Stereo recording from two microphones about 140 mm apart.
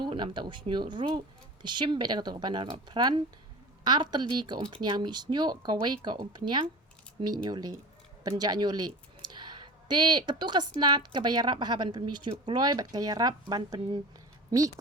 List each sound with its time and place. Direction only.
0.0 s speech: 35° right (ahead or behind)